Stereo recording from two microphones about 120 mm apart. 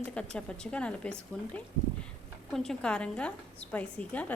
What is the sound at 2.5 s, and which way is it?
A woman's voice, 5° left (ahead or behind).